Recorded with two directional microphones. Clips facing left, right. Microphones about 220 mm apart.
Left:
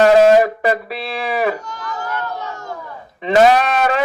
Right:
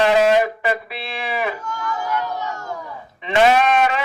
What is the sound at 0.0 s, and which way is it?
Speech, 40° left (ahead or behind).